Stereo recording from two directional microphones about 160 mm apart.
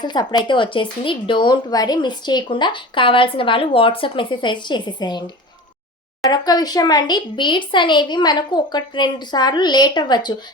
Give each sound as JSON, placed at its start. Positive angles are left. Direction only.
{"t": 0.0, "sound": "speech", "side_deg": 25}
{"t": 6.3, "sound": "speech", "side_deg": 25}